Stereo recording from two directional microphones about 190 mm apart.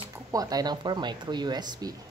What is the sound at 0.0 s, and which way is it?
Speech, 20° right (ahead or behind).